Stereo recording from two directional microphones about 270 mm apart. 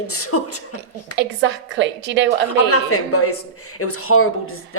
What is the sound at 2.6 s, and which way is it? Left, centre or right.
Speech, left.